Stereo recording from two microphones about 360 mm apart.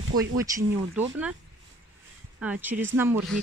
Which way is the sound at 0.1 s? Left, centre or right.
Centre.